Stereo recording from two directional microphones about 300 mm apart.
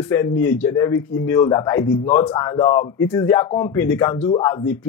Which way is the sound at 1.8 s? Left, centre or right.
Left.